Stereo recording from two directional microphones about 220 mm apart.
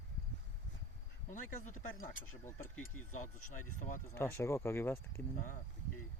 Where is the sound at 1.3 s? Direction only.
35° left (ahead or behind).